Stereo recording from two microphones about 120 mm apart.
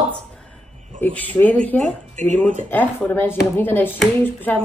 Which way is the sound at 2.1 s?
90° right.